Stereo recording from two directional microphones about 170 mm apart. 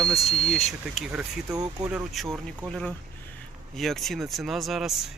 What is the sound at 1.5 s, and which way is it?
Speech, 20° right (ahead or behind).